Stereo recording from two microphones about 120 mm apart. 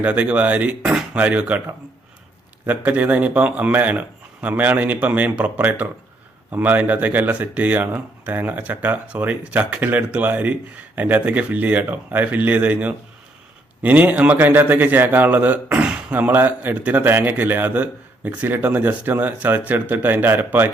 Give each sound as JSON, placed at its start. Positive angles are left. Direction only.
{"t": 0.0, "sound": "a man's voice", "side_deg": -10}
{"t": 2.6, "sound": "a man's voice", "side_deg": -15}